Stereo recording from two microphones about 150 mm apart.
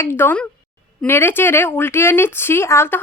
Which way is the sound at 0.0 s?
15° left (ahead or behind).